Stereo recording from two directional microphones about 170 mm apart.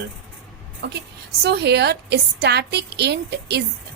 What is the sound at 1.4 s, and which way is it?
A woman's voice, 75° right (ahead or behind).